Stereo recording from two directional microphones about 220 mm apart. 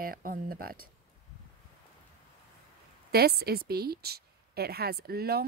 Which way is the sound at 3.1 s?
45° right (ahead or behind).